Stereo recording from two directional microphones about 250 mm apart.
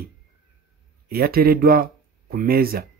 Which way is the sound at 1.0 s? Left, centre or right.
Right.